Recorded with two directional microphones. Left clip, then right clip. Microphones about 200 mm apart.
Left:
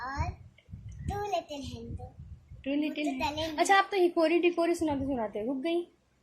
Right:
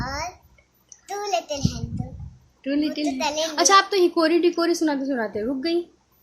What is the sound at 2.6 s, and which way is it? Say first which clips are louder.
A woman's voice: right 7 dB; 15° right (ahead or behind).